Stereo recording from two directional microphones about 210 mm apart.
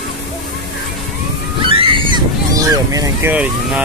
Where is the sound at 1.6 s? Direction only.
25° right (ahead or behind).